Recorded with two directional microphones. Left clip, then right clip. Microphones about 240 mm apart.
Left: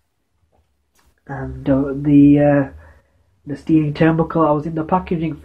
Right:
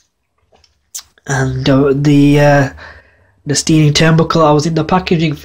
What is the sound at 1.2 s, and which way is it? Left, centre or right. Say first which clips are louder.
Speech: right 9 dB; right.